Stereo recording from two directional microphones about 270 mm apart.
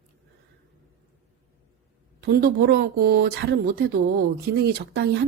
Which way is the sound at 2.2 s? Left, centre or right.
Right.